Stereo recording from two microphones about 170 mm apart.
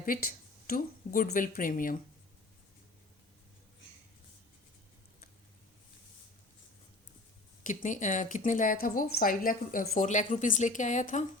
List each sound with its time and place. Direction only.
0.0 s speech: 60° left (ahead or behind)
7.6 s speech: 50° left (ahead or behind)